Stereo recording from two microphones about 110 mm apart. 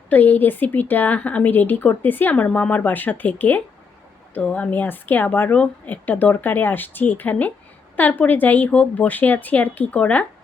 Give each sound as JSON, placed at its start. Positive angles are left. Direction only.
{"t": 0.1, "sound": "a woman's voice", "side_deg": 15}